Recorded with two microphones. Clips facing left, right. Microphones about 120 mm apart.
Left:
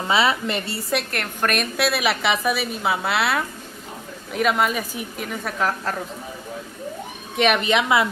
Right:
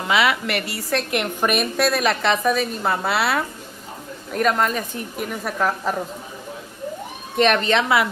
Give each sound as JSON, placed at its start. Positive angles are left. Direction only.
{"t": 0.1, "sound": "a woman's voice", "side_deg": 25}
{"t": 1.1, "sound": "a woman's voice", "side_deg": -10}
{"t": 1.8, "sound": "a woman's voice", "side_deg": 5}
{"t": 7.3, "sound": "a woman's voice", "side_deg": 5}